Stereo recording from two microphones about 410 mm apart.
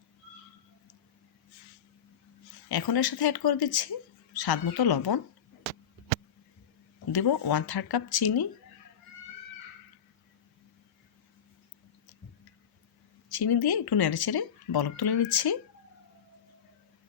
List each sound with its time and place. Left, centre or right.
2.6 s speech: left
7.1 s speech: left
13.2 s speech: left